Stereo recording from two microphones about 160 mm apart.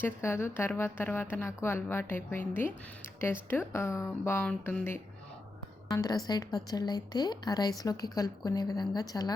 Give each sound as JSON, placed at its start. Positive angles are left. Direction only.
{"t": 0.0, "sound": "speech", "side_deg": 15}
{"t": 5.9, "sound": "a woman's voice", "side_deg": 25}